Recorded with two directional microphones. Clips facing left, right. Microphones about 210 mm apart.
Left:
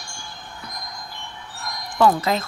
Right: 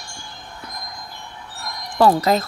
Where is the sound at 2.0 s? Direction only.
40° right (ahead or behind).